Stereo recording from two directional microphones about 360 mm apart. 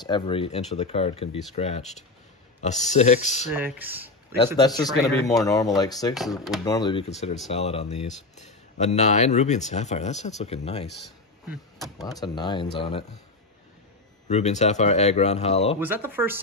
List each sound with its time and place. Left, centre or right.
0.0 s speech: centre
3.5 s speech: centre
4.6 s speech: centre
6.3 s speech: centre
6.6 s speech: centre
14.2 s speech: centre
15.8 s speech: centre